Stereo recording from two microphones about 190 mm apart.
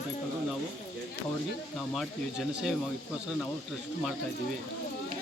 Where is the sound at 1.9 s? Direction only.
Centre (ahead or behind).